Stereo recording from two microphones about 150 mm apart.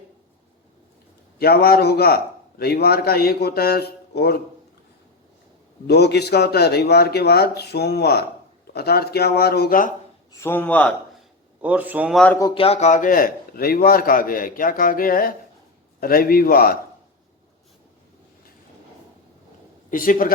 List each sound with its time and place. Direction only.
1.4 s a man's voice: 90° left
5.9 s a man's voice: 90° left; by 9.9 s 70° left (ahead or behind)
10.3 s a man's voice: 15° left (ahead or behind)
11.6 s a man's voice: 10° right (ahead or behind)
12.1 s a man's voice: 5° left (ahead or behind)
12.5 s a man's voice: 45° left (ahead or behind); by 16.7 s 80° left
19.9 s a man's voice: 65° left (ahead or behind)